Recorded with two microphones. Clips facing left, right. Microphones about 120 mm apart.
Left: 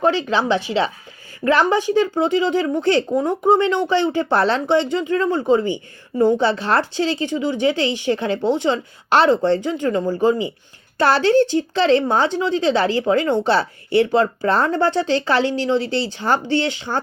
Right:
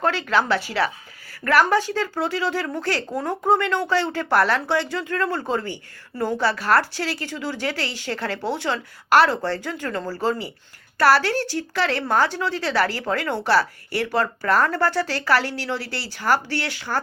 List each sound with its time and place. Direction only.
0.0 s speech: 15° left (ahead or behind)